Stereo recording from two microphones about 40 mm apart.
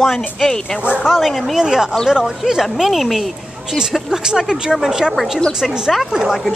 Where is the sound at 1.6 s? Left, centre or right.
Centre.